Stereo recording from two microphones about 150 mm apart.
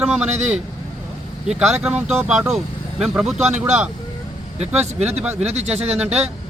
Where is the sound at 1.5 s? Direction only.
5° right (ahead or behind).